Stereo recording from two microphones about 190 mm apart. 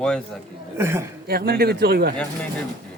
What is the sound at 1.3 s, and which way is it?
Speech, 55° right (ahead or behind).